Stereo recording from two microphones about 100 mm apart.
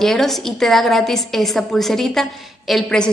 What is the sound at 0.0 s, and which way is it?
A woman's voice, 5° left (ahead or behind).